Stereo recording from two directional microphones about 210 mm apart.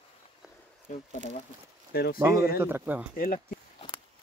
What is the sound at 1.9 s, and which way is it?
Speech, 50° left (ahead or behind).